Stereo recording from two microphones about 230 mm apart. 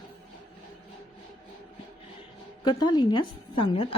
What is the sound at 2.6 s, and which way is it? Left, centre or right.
A woman's voice, centre.